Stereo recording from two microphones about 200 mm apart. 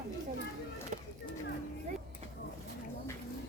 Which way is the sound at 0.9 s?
35° right (ahead or behind).